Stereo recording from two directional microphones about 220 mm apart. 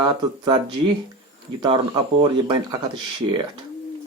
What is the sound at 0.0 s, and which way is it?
Speech, 20° right (ahead or behind).